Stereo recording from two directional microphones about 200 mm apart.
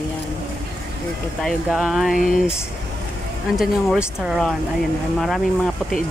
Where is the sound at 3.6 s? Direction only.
5° right (ahead or behind).